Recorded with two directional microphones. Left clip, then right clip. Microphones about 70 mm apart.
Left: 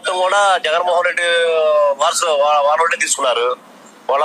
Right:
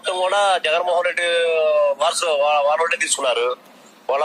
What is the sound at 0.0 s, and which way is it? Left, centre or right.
Speech, right.